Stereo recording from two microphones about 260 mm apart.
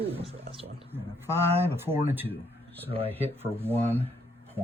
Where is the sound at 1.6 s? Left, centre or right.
Centre.